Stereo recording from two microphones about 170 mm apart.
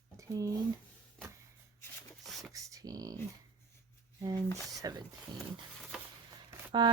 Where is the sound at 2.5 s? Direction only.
20° right (ahead or behind).